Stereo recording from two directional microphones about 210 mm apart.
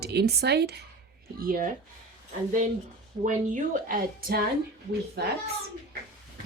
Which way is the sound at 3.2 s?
40° right (ahead or behind).